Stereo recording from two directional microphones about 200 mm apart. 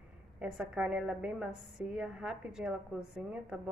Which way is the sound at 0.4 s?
5° right (ahead or behind).